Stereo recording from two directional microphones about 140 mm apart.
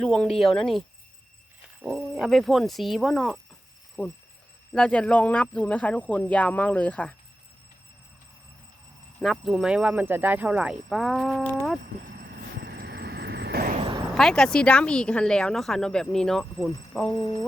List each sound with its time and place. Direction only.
0.0 s speech: 5° left (ahead or behind)
1.8 s speech: centre (ahead or behind)
9.2 s speech: centre (ahead or behind)
13.5 s vehicle: 90° right
13.7 s a sound: 40° right (ahead or behind)
14.2 s speech: 5° left (ahead or behind)